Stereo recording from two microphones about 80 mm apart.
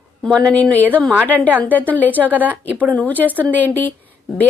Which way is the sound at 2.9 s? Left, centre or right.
Centre.